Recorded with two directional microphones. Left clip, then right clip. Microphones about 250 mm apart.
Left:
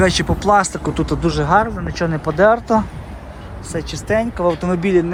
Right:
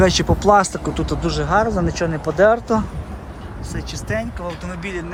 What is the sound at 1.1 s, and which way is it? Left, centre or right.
Speech, centre.